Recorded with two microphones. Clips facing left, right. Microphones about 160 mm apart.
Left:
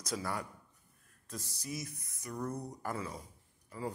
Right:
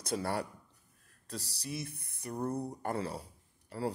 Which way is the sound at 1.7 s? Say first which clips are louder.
Right 2 dB; 30° right (ahead or behind).